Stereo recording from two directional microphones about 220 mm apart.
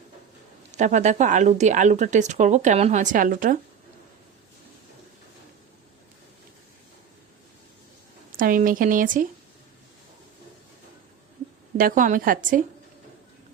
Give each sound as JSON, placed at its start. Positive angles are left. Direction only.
{"t": 0.8, "sound": "speech", "side_deg": -35}
{"t": 8.4, "sound": "speech", "side_deg": -40}
{"t": 11.8, "sound": "speech", "side_deg": -40}